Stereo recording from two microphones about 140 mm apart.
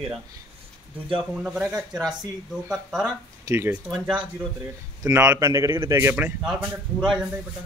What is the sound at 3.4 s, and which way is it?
Speech, 20° right (ahead or behind).